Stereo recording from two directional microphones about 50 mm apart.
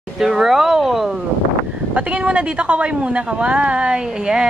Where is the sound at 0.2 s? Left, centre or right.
Centre.